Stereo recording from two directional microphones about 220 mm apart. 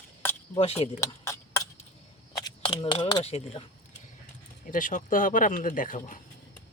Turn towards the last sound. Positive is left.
turn(degrees=35)  # may be behind; listen again after turning